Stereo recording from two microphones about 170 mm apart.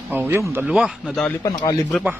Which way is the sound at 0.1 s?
10° right (ahead or behind).